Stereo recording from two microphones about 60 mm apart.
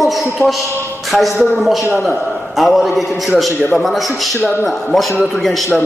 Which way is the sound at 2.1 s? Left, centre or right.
Right.